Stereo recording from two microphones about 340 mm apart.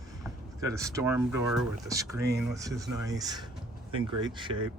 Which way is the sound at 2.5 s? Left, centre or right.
Centre.